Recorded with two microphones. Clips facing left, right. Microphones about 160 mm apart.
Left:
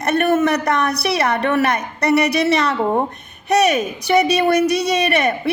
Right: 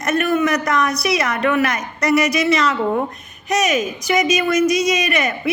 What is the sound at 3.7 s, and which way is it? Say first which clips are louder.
Speech: even; 60° left (ahead or behind).